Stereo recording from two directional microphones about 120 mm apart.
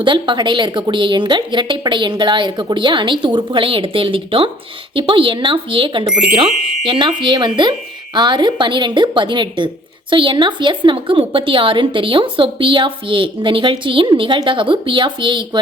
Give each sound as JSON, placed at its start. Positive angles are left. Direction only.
{"t": 0.0, "sound": "a woman's voice", "side_deg": -40}